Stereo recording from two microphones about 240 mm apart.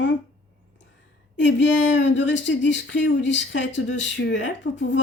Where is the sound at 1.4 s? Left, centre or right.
Left.